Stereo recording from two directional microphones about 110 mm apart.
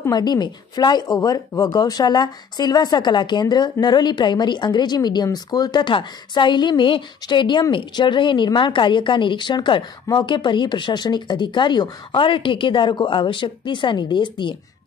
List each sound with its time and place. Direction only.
0.1 s speech: 40° left (ahead or behind)